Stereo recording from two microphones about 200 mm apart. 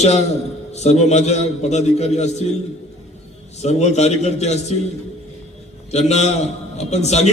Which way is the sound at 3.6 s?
35° left (ahead or behind).